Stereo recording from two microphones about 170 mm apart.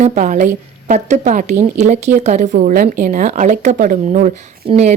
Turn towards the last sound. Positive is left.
turn(degrees=-40)  # may be behind; listen again after turning